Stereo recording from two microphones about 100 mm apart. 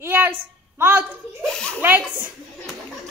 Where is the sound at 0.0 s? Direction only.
20° right (ahead or behind).